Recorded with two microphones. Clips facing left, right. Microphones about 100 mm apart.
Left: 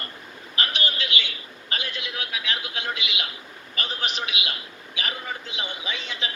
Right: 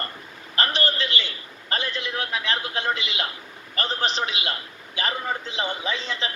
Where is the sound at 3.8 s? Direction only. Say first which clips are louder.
Right 5 dB; 35° right (ahead or behind).